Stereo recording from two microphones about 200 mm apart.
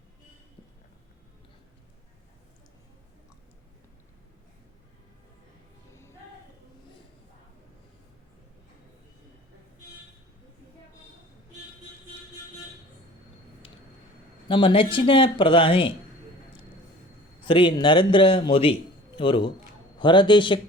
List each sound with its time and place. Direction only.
5.9 s music: 15° left (ahead or behind)
14.4 s speech: 25° left (ahead or behind)
17.4 s a man's voice: 25° left (ahead or behind)